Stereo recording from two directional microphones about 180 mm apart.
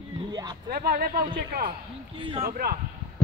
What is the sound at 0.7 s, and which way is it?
A man's voice, 60° right (ahead or behind).